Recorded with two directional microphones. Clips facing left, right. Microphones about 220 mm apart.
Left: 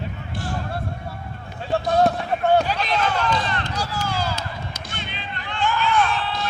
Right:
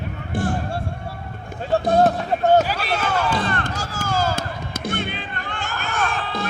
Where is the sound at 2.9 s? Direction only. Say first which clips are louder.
Right 1 dB; 50° right (ahead or behind).